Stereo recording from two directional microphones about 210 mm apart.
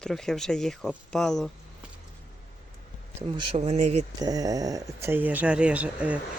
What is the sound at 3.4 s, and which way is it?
Speech, 30° right (ahead or behind).